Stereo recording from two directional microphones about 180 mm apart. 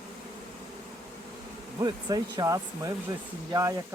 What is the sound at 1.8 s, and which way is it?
Speech, 20° right (ahead or behind).